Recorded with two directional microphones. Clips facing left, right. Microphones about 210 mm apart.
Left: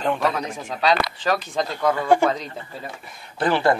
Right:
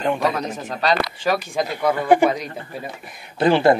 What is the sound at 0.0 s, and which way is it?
Speech, 5° right (ahead or behind).